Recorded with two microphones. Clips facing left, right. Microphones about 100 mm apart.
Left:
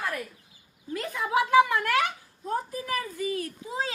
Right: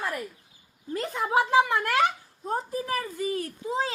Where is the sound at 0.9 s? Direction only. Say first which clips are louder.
Right 1 dB; 35° right (ahead or behind).